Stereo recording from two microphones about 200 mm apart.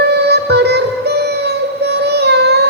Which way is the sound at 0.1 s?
55° right (ahead or behind).